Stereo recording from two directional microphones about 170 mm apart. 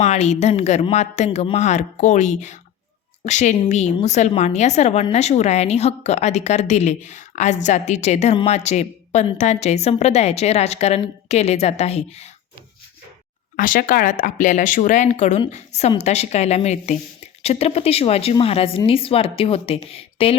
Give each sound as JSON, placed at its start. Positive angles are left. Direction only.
{"t": 0.0, "sound": "a woman's voice", "side_deg": 40}
{"t": 13.6, "sound": "a woman's voice", "side_deg": 55}